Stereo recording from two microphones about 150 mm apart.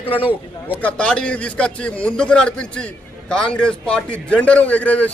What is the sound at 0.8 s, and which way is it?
A man's voice, 10° left (ahead or behind).